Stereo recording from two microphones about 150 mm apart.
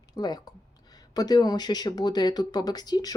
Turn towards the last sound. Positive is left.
turn(degrees=25)  # may be behind; listen again after turning